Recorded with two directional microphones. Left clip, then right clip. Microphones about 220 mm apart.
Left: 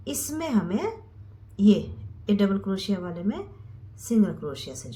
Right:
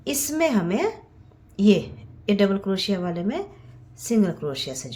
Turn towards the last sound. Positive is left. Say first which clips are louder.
# right 6 dB
turn(degrees=-40)  # may be behind; listen again after turning